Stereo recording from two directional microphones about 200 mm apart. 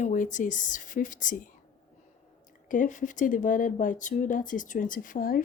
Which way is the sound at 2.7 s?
40° left (ahead or behind).